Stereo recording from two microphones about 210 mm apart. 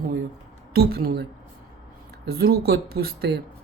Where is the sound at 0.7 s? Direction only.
50° right (ahead or behind).